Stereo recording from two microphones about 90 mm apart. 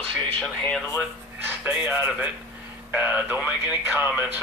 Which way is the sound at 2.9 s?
15° right (ahead or behind).